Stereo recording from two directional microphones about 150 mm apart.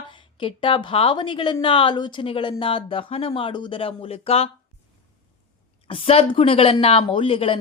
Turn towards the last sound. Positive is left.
turn(degrees=35)  # may be behind; listen again after turning